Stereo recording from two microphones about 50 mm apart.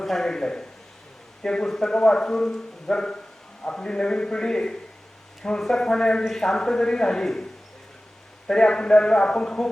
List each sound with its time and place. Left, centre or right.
0.0 s speech: centre
8.4 s speech: centre